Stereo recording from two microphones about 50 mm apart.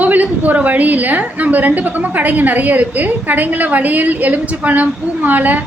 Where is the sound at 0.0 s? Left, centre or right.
Right.